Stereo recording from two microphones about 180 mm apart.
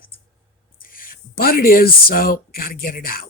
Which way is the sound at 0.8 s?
50° left (ahead or behind).